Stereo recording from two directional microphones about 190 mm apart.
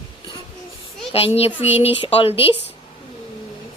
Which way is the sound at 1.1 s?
30° left (ahead or behind).